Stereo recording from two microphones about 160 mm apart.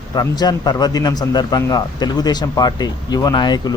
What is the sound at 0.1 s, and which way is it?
A man's voice, 25° left (ahead or behind).